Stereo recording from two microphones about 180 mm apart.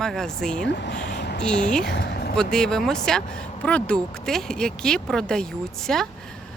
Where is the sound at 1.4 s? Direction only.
5° left (ahead or behind).